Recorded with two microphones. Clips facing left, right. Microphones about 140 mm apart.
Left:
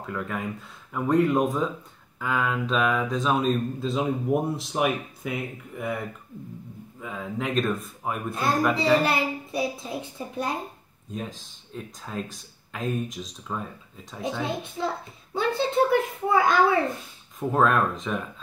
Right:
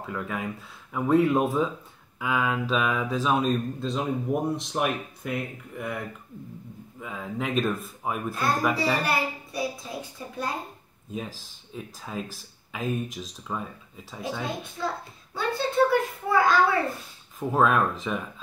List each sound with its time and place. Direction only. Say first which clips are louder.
0.0 s speech: left 1 dB; centre (ahead or behind)
9.0 s a child's voice: left 2 dB; 25° left (ahead or behind)
11.1 s speech: even; 5° right (ahead or behind)
14.4 s a child's voice: left 4 dB; 25° left (ahead or behind)
15.3 s a sound: left 2 dB; 20° left (ahead or behind)
17.4 s speech: even; centre (ahead or behind)